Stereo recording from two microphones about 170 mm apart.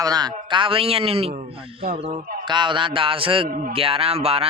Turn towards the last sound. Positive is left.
turn(degrees=-35)  # may be behind; listen again after turning